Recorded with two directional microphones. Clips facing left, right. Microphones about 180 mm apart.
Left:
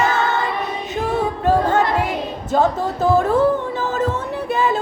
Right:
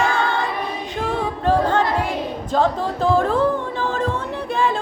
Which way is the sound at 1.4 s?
10° left (ahead or behind).